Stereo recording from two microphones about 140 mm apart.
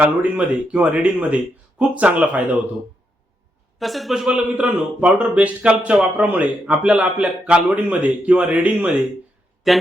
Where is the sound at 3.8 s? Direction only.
Centre (ahead or behind).